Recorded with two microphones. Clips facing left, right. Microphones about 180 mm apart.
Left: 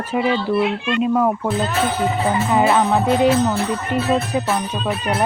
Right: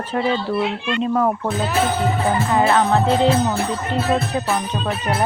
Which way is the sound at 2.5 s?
15° left (ahead or behind).